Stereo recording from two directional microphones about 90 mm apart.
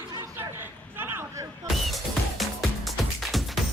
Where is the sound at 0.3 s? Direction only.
25° right (ahead or behind).